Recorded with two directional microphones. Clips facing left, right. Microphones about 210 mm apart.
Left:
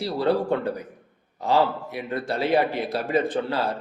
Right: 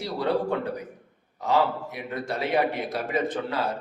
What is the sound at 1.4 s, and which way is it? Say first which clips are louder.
A man's voice: left 2 dB; 30° left (ahead or behind).